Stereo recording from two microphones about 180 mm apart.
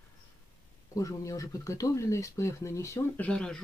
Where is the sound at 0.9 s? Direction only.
20° left (ahead or behind).